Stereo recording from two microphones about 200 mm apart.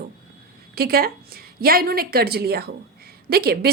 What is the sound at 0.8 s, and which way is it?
A woman's voice, 50° right (ahead or behind).